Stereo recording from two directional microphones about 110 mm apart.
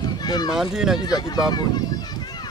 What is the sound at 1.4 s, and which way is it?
Speech, 40° left (ahead or behind).